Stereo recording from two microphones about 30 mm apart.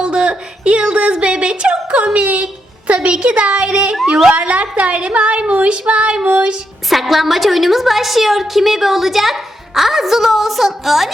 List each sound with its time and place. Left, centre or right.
0.0 s speech: right
2.1 s a woman's voice: right
6.9 s a woman's voice: centre